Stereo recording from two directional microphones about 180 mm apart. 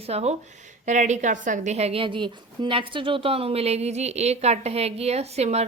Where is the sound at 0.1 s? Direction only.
35° right (ahead or behind).